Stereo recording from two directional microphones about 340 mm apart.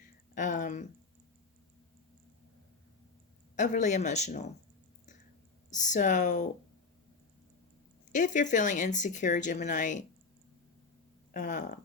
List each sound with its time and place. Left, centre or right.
0.3 s speech: left
3.5 s speech: left
5.7 s speech: left
8.1 s speech: left
11.3 s speech: left